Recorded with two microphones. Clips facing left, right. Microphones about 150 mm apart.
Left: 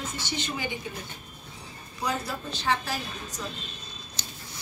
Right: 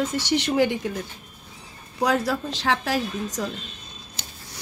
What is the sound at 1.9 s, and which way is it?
Speech, 90° right.